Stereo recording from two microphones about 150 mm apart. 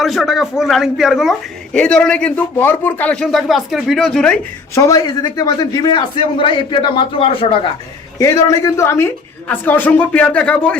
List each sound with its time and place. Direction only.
0.0 s a man's voice: centre (ahead or behind)
4.7 s a man's voice: 20° left (ahead or behind); by 7.7 s 35° left (ahead or behind)
8.2 s a woman's voice: 20° left (ahead or behind)